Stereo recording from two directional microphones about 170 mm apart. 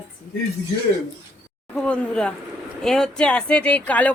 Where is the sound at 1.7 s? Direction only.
5° left (ahead or behind).